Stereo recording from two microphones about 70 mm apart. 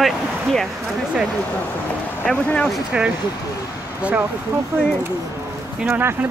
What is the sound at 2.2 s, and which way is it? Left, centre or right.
Speech, centre.